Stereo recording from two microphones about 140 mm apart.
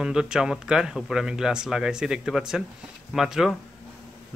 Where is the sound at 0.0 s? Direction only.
5° right (ahead or behind).